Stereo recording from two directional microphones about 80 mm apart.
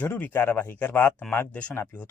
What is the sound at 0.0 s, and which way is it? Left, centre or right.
Speech, left.